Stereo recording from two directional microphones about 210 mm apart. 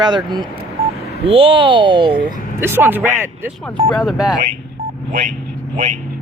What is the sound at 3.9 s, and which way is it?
Speech, centre (ahead or behind).